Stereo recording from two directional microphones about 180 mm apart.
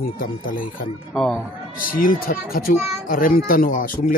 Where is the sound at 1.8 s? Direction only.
50° left (ahead or behind).